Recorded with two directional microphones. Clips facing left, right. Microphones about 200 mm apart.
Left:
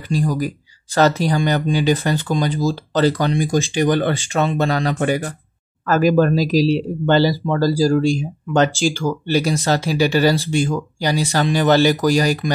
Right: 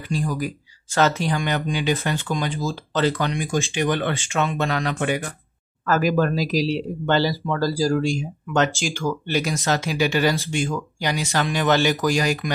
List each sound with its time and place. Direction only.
0.1 s speech: 35° left (ahead or behind)